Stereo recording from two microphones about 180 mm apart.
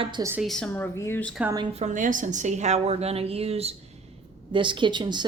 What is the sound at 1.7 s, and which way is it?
A woman's voice, 40° right (ahead or behind).